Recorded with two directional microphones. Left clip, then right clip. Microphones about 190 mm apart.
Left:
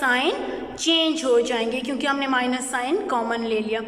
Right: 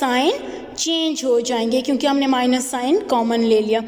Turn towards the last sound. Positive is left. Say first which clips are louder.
# right 8 dB
turn(degrees=-30)  # may be behind; listen again after turning